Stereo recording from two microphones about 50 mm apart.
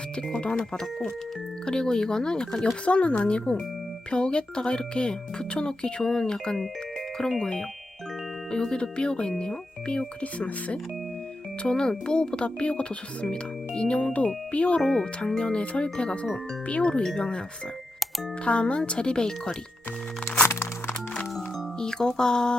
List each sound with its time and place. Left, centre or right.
0.2 s speech: centre
14.8 s speech: centre
18.4 s speech: left
21.8 s speech: centre